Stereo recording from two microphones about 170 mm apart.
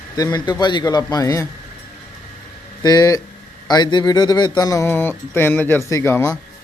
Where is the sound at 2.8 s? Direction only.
20° left (ahead or behind).